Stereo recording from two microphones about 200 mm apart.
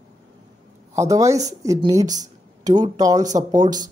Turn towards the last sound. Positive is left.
turn(degrees=-20)  # may be behind; listen again after turning